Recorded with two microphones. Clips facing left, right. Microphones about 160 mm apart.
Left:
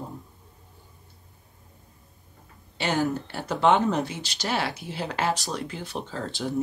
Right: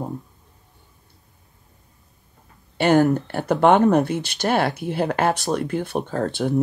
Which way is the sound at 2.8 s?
55° right (ahead or behind).